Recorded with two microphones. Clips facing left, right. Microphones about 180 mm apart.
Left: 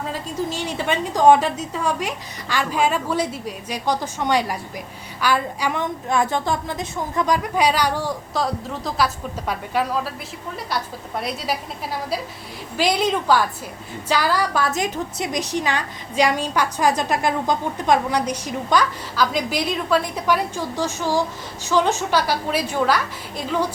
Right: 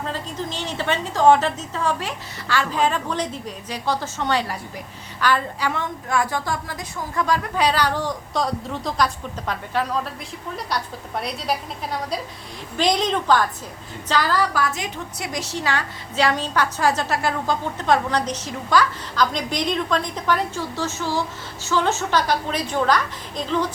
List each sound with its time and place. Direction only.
0.0 s a woman's voice: 10° left (ahead or behind)
12.7 s a woman's voice: 5° left (ahead or behind)